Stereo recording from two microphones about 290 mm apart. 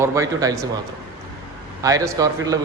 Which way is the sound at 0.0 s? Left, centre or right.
Centre.